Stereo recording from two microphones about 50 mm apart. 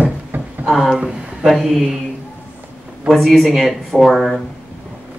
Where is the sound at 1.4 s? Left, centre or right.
Centre.